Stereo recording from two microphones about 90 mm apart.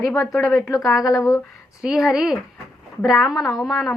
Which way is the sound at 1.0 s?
35° left (ahead or behind).